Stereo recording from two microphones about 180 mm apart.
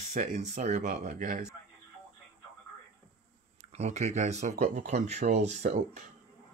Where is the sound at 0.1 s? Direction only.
40° right (ahead or behind).